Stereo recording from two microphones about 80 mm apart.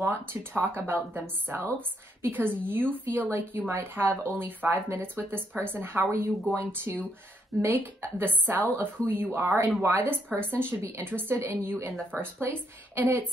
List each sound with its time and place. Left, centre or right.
0.1 s a woman's voice: right